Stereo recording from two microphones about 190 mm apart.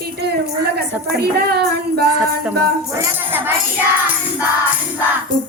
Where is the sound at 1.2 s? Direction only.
55° right (ahead or behind).